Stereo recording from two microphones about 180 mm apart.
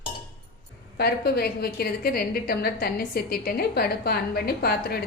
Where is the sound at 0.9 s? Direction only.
60° left (ahead or behind).